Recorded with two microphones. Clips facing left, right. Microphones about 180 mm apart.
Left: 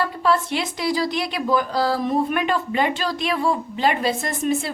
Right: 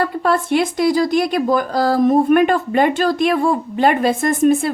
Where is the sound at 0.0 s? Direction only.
55° right (ahead or behind).